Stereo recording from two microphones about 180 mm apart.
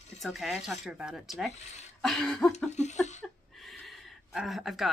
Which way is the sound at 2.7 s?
40° left (ahead or behind).